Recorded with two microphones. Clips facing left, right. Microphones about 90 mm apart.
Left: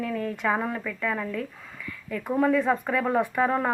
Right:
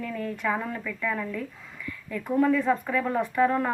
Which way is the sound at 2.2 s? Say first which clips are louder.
Even; 20° left (ahead or behind).